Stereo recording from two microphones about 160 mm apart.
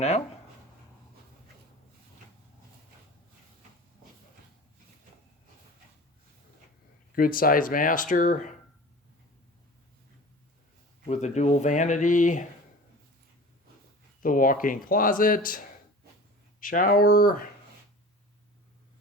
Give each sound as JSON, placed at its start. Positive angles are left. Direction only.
{"t": 7.2, "sound": "speech", "side_deg": 65}
{"t": 11.0, "sound": "speech", "side_deg": 45}
{"t": 14.2, "sound": "speech", "side_deg": 60}